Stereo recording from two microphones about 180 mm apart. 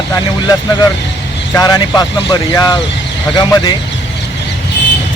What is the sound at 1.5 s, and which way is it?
Speech, 20° left (ahead or behind).